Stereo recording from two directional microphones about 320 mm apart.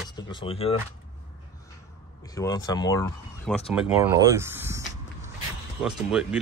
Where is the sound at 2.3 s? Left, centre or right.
Centre.